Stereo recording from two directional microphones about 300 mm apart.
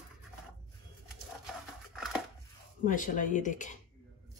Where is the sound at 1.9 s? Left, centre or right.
Centre.